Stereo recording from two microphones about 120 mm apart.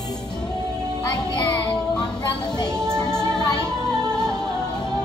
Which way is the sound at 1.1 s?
35° left (ahead or behind).